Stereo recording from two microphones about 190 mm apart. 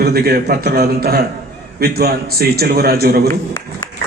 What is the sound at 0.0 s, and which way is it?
A man's voice, 55° right (ahead or behind).